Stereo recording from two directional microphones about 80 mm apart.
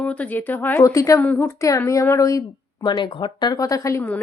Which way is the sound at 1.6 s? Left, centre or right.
Left.